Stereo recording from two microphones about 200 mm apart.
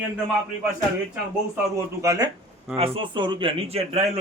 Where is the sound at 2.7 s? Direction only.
30° right (ahead or behind).